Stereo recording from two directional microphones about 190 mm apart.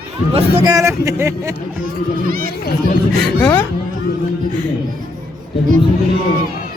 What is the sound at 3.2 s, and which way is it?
Speech, 10° left (ahead or behind).